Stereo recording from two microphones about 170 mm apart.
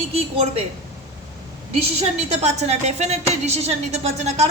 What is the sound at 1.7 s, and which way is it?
A woman's voice, 40° right (ahead or behind).